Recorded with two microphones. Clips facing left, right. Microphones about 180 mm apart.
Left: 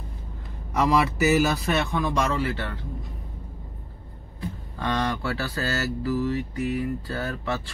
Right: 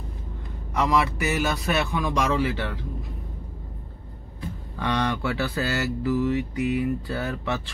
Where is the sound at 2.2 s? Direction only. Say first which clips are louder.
Right 2 dB; 15° right (ahead or behind).